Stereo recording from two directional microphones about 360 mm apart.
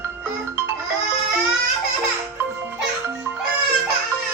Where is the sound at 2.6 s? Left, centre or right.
Centre.